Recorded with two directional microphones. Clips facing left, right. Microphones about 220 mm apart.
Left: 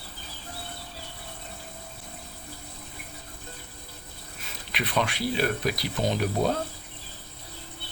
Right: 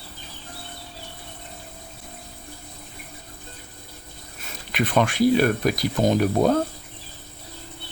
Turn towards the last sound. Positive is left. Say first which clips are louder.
# right 7 dB
turn(degrees=-45)  # may be behind; listen again after turning